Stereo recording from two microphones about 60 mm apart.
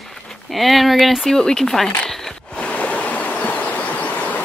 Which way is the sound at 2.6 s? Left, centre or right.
Left.